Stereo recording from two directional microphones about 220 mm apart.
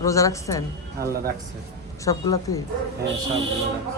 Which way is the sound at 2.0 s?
15° left (ahead or behind).